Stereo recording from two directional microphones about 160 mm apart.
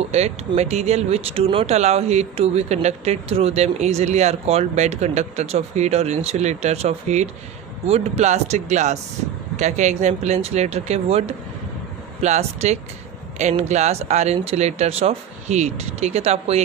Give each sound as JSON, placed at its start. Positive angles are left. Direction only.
{"t": 0.1, "sound": "speech", "side_deg": -45}